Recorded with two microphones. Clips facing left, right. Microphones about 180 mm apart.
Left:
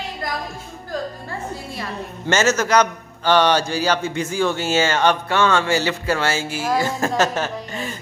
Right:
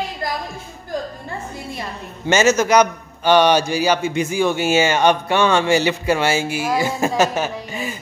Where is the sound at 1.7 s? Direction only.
15° right (ahead or behind).